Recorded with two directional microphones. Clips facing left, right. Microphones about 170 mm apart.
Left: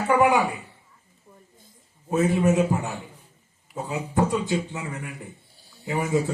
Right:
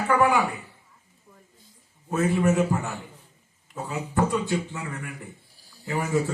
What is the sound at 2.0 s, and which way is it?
Speech, 20° left (ahead or behind).